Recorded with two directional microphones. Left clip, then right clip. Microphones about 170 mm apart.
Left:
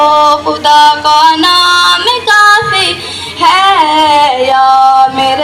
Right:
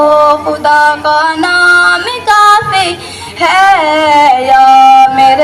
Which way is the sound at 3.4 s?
15° right (ahead or behind).